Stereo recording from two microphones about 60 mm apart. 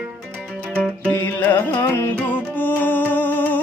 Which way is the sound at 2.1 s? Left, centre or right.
Left.